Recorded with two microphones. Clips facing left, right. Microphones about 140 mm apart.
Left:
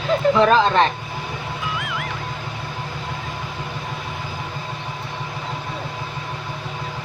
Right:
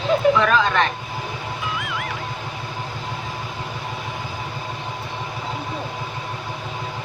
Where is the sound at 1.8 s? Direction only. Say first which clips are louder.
Even; centre (ahead or behind).